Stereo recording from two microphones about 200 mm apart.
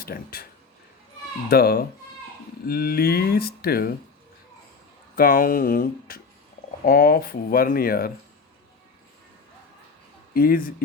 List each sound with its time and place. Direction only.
0.0 s speech: 50° left (ahead or behind)
1.5 s speech: 50° left (ahead or behind)
5.1 s speech: 45° left (ahead or behind)
10.3 s speech: 45° left (ahead or behind)